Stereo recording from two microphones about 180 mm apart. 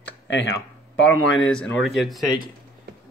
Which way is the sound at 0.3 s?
80° left.